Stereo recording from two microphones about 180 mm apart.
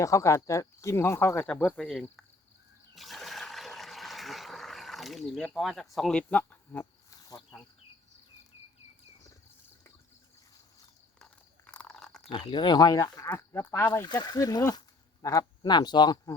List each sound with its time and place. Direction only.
0.0 s speech: 15° left (ahead or behind)
2.9 s toilet flush: centre (ahead or behind)
11.2 s biting: 5° left (ahead or behind)
12.3 s speech: 25° left (ahead or behind)